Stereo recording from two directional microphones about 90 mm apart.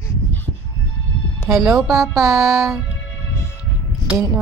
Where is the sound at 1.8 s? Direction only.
35° right (ahead or behind).